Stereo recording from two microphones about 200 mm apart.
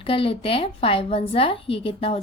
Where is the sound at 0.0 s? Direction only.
25° left (ahead or behind).